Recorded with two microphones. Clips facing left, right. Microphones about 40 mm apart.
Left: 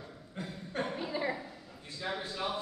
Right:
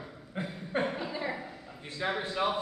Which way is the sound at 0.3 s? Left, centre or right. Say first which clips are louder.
Right 7 dB; right.